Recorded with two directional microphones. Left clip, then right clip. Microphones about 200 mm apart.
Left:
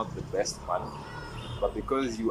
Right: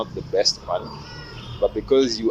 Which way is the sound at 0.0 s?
30° right (ahead or behind).